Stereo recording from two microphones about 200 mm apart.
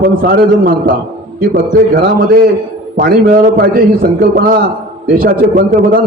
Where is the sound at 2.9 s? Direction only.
45° right (ahead or behind).